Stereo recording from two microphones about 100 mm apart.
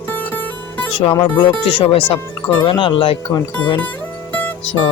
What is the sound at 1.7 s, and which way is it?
Speech, 60° left (ahead or behind).